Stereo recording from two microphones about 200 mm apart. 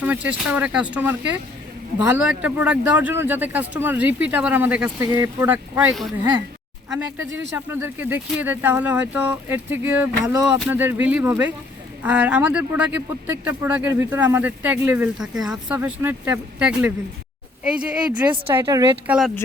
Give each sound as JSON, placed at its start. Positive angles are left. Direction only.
{"t": 0.0, "sound": "speech", "side_deg": -5}
{"t": 7.5, "sound": "speech", "side_deg": -10}
{"t": 18.6, "sound": "speech", "side_deg": -20}
{"t": 19.0, "sound": "speech", "side_deg": -5}